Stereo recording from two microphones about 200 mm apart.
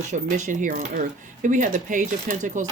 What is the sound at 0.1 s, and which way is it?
Speech, 35° right (ahead or behind).